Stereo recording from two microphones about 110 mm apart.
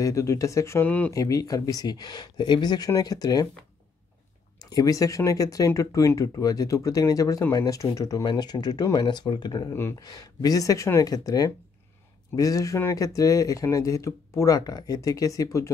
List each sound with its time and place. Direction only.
0.0 s speech: 30° left (ahead or behind)
0.8 s speech: 15° left (ahead or behind)
1.1 s speech: 30° left (ahead or behind)
4.6 s speech: 35° left (ahead or behind)
9.7 s speech: 25° left (ahead or behind)
10.0 s speech: 35° left (ahead or behind)